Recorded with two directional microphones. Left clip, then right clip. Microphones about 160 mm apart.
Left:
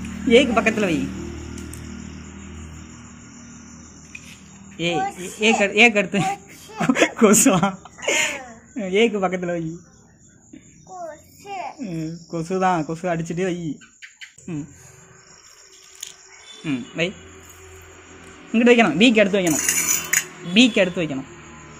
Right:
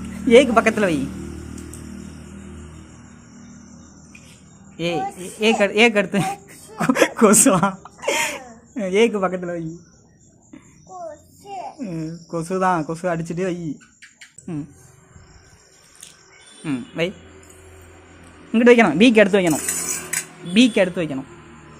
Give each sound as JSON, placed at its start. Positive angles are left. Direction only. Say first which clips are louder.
{"t": 0.3, "sound": "a man's voice", "louder": "right 3 dB", "side_deg": -20}
{"t": 4.7, "sound": "speech", "louder": "left 1 dB", "side_deg": -5}
{"t": 6.8, "sound": "a sound", "louder": "right 1 dB", "side_deg": -5}
{"t": 9.4, "sound": "a man's voice", "louder": "left 2 dB", "side_deg": 25}
{"t": 11.8, "sound": "speech", "louder": "even", "side_deg": -5}
{"t": 16.6, "sound": "speech", "louder": "even", "side_deg": -5}
{"t": 18.5, "sound": "speech", "louder": "right 2 dB", "side_deg": -15}